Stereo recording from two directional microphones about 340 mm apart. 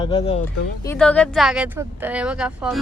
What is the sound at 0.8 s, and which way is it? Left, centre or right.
Speech, centre.